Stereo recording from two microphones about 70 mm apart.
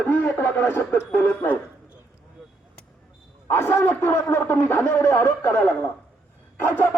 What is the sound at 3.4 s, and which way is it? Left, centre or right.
Speech, left.